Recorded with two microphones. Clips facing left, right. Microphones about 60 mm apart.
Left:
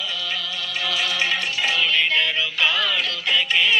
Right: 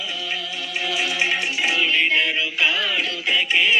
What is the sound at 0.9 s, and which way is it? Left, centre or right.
Music, centre.